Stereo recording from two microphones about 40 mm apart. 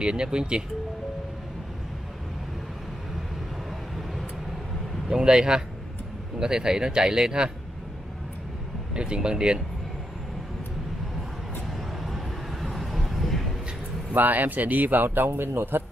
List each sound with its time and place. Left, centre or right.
0.0 s speech: right
3.9 s vehicle: centre
5.1 s speech: right
8.9 s speech: right
12.0 s vehicle: centre
14.1 s a man's voice: right